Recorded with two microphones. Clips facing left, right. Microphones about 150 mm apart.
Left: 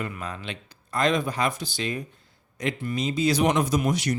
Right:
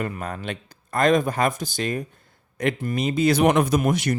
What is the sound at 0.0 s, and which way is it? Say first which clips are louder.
Speech: right 4 dB; 50° right (ahead or behind).